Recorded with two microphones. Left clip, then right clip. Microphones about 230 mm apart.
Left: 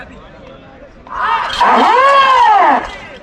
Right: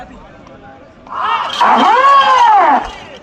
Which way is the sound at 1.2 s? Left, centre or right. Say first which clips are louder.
Left 1 dB; centre.